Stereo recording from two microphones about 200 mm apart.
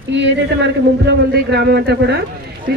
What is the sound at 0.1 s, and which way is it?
A man's voice, 60° right (ahead or behind).